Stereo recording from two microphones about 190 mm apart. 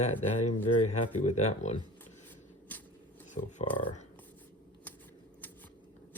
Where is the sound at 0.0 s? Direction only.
35° left (ahead or behind).